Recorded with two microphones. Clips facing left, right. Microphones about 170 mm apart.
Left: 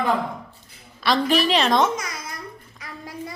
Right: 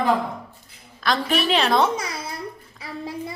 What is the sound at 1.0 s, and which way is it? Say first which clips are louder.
Speech: left 2 dB; centre (ahead or behind).